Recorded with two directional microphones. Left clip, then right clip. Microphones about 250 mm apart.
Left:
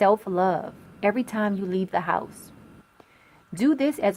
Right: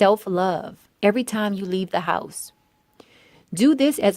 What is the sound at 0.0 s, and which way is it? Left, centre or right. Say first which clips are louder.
Speech: right 2 dB; right.